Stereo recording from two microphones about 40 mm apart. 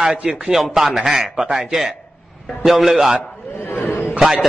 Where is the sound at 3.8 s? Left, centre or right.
Left.